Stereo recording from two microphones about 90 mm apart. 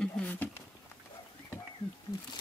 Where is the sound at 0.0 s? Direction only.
20° left (ahead or behind).